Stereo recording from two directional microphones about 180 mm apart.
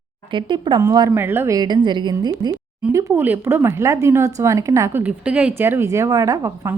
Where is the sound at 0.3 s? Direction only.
25° right (ahead or behind).